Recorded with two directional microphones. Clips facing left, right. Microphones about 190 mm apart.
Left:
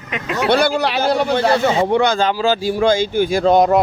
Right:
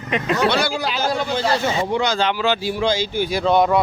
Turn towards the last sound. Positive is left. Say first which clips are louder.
# left 4 dB
turn(degrees=40)  # may be behind; listen again after turning